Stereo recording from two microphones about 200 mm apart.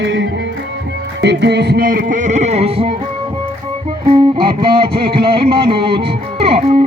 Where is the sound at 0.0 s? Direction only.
65° right (ahead or behind).